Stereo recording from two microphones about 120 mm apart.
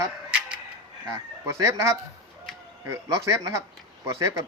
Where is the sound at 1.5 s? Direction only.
25° right (ahead or behind).